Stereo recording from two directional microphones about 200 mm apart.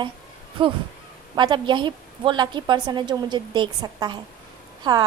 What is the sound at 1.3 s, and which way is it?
A woman's voice, 25° right (ahead or behind).